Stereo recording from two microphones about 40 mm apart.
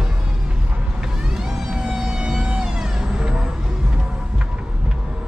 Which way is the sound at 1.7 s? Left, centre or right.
Centre.